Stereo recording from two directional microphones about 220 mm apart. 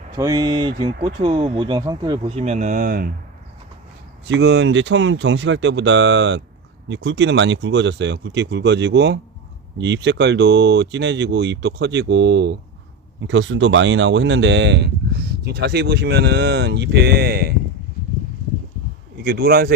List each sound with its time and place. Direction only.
0.2 s speech: 15° right (ahead or behind); by 3.1 s 40° right (ahead or behind)
4.3 s speech: 50° right (ahead or behind)
19.1 s speech: 45° right (ahead or behind)